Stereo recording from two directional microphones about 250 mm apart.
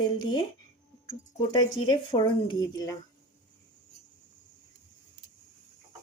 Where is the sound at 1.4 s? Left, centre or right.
Centre.